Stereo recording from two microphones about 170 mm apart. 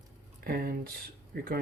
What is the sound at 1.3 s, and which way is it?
Speech, 60° right (ahead or behind).